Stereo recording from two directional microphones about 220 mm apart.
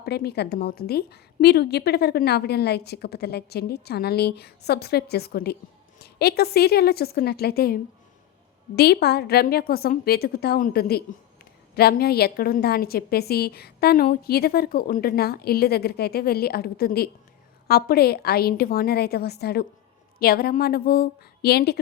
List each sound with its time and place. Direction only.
0.0 s a woman's voice: 45° left (ahead or behind)